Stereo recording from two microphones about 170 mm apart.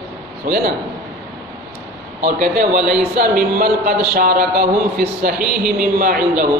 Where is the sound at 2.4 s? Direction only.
60° right (ahead or behind).